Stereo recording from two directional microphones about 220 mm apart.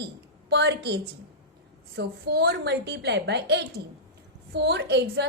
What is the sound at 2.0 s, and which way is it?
A woman's voice, 45° right (ahead or behind).